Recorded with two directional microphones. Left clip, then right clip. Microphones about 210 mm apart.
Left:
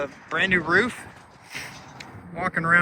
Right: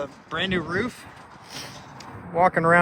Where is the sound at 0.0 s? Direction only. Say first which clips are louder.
Left 3 dB; 5° right (ahead or behind).